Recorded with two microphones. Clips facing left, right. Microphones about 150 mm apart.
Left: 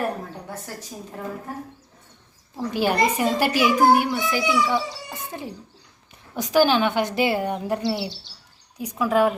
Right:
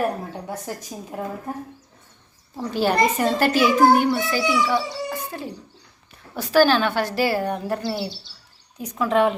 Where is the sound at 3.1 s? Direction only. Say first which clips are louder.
Right 2 dB; 10° left (ahead or behind).